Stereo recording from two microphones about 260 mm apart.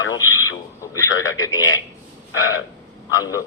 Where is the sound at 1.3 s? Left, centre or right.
Centre.